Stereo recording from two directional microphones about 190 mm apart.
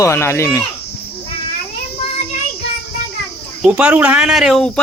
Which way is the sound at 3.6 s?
5° right (ahead or behind).